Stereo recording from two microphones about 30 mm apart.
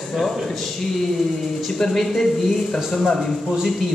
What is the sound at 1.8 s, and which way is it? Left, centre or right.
Speech, centre.